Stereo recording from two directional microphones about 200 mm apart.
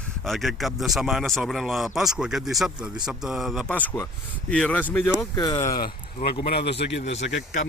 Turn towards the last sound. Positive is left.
turn(degrees=65)  # may be behind; listen again after turning